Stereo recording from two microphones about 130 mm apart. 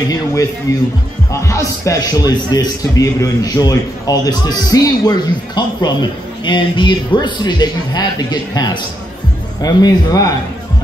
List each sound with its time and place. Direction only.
0.1 s a man's voice: 25° left (ahead or behind)